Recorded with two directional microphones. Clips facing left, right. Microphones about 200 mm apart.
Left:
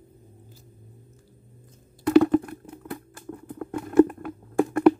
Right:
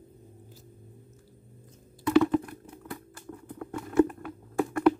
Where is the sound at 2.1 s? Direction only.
45° left (ahead or behind).